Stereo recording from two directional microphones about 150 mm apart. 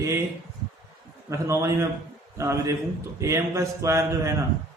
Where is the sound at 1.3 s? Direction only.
20° right (ahead or behind).